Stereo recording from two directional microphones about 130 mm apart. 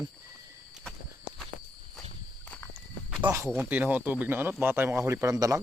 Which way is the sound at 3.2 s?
15° right (ahead or behind).